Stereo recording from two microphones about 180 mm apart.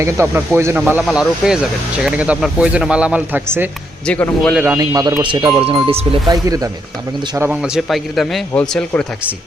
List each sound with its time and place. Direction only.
0.0 s speech: 15° right (ahead or behind)
4.0 s speech: 5° left (ahead or behind)
4.6 s speech: 15° right (ahead or behind)
7.3 s a man's voice: 10° right (ahead or behind); by 9.0 s 5° left (ahead or behind)